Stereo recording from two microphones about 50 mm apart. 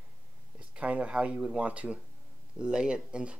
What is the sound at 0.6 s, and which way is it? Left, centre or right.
Speech, right.